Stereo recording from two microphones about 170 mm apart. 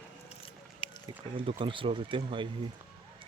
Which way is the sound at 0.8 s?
30° left (ahead or behind).